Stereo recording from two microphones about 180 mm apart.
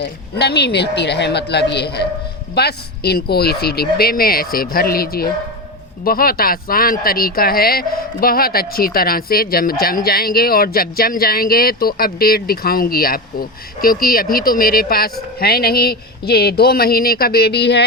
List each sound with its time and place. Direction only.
0.0 s speech: 70° left (ahead or behind)